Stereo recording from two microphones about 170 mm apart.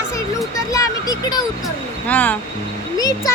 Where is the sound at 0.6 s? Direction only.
20° left (ahead or behind).